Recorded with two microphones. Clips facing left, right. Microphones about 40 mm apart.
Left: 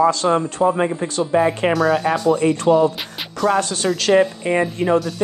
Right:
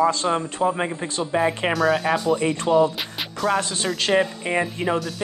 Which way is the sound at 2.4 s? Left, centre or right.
Centre.